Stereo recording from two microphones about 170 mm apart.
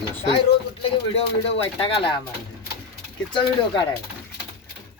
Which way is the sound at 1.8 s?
30° left (ahead or behind).